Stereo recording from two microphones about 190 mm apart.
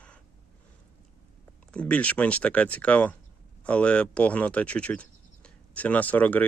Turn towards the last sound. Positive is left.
turn(degrees=10)  # may be behind; listen again after turning